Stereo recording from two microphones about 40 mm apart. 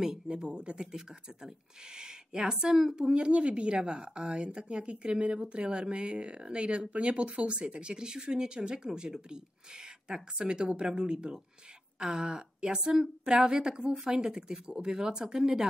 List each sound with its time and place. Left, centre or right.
0.0 s speech: centre
0.7 s speech: centre
3.1 s speech: right